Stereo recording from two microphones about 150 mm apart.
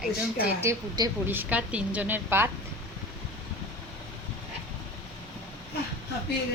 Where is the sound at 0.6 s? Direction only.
20° right (ahead or behind).